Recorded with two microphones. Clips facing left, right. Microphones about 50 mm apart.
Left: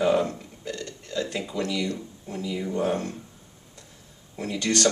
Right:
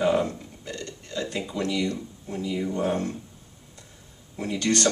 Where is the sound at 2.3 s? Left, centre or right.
Centre.